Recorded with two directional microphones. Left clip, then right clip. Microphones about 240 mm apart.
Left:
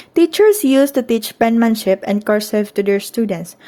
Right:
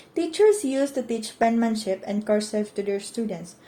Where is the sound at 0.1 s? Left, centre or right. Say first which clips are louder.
Left 8 dB; left.